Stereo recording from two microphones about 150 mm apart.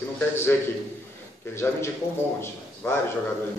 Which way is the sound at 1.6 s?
20° left (ahead or behind).